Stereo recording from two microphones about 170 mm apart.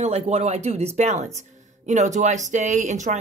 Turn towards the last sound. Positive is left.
turn(degrees=-45)  # may be behind; listen again after turning